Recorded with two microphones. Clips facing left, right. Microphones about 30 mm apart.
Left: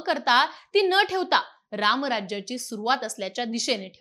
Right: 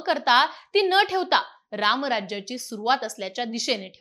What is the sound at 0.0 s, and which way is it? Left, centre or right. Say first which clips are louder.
A woman's voice: right 1 dB; centre.